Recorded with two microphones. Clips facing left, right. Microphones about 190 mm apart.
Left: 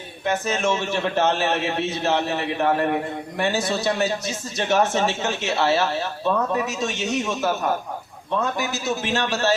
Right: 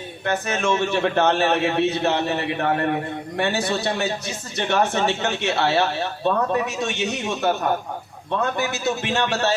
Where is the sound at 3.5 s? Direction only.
60° right (ahead or behind).